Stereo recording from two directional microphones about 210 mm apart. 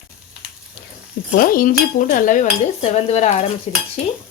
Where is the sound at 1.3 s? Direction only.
40° left (ahead or behind).